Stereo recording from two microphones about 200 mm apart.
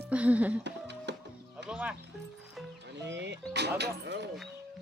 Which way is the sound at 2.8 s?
60° right (ahead or behind).